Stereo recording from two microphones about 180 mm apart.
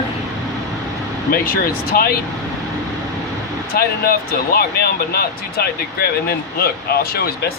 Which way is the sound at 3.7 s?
55° left (ahead or behind).